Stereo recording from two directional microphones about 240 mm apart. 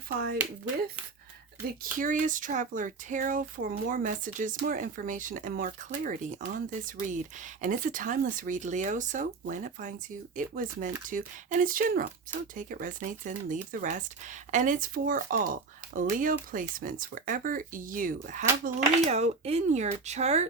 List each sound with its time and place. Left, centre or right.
1.8 s speech: right